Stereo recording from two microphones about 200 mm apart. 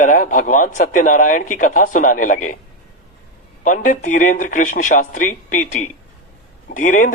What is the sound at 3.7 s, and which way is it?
Speech, 40° left (ahead or behind).